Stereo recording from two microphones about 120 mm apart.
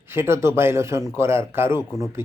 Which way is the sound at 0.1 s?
20° right (ahead or behind).